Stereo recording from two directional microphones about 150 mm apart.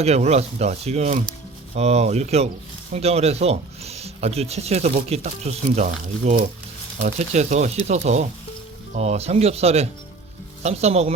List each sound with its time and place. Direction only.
0.0 s speech: 45° right (ahead or behind)